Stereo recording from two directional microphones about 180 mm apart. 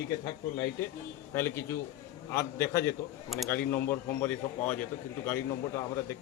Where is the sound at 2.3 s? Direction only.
15° left (ahead or behind).